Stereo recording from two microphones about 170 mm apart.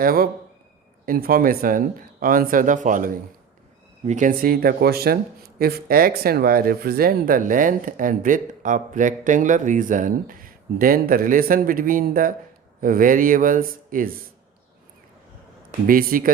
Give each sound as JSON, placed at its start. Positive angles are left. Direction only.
{"t": 0.0, "sound": "speech", "side_deg": -60}
{"t": 15.9, "sound": "speech", "side_deg": -55}